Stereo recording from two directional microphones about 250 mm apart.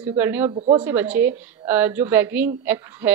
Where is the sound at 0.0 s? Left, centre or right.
Centre.